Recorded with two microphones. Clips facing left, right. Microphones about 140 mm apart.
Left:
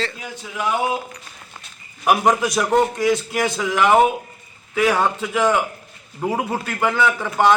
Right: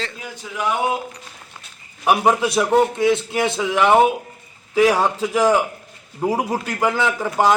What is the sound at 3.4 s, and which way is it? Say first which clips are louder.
Speech: right 1 dB; 25° right (ahead or behind).